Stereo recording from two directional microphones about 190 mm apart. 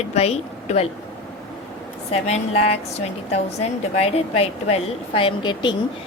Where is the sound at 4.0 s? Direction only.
30° left (ahead or behind).